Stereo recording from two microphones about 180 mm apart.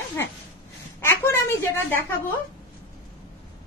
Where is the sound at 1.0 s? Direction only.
15° left (ahead or behind).